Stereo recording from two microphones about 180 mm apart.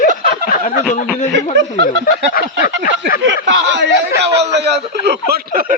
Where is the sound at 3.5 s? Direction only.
85° right.